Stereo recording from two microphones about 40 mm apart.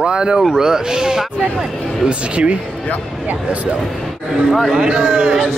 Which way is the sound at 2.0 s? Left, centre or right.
Right.